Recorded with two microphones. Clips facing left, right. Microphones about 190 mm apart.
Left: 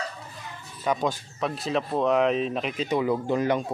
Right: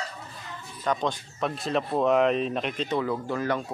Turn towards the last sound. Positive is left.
turn(degrees=20)  # may be behind; listen again after turning